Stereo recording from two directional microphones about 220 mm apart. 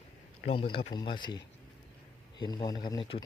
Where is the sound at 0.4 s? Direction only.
25° left (ahead or behind).